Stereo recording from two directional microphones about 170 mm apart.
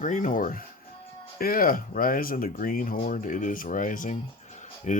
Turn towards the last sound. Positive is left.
turn(degrees=45)  # may be behind; listen again after turning